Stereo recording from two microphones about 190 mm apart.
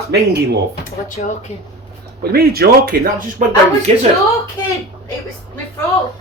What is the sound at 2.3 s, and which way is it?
Speech, 55° right (ahead or behind).